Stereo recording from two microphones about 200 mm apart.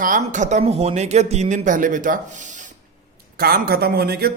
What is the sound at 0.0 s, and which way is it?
Speech, 40° right (ahead or behind).